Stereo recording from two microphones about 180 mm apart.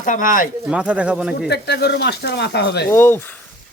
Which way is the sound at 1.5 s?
65° left (ahead or behind).